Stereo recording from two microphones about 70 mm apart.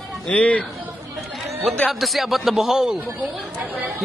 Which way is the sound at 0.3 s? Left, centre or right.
Centre.